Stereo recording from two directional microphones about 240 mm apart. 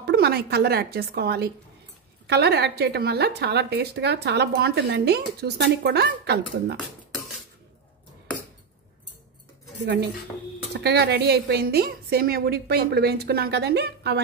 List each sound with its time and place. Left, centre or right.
0.0 s a woman's voice: right
9.8 s a woman's voice: right